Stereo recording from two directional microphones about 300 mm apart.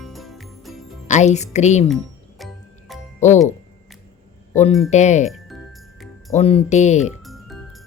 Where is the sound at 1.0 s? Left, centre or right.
Left.